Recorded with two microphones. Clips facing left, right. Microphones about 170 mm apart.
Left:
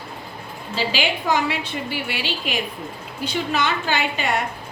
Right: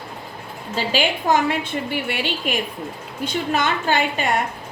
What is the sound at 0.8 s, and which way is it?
A woman's voice, 45° right (ahead or behind).